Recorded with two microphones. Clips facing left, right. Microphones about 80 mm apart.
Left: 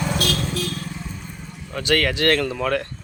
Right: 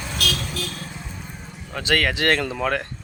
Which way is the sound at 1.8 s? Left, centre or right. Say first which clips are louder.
Left 1 dB; centre.